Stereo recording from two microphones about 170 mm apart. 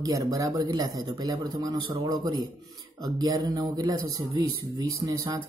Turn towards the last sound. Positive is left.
turn(degrees=-20)  # may be behind; listen again after turning